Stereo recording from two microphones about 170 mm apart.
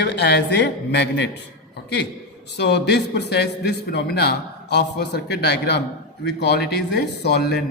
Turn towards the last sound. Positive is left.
turn(degrees=75)  # may be behind; listen again after turning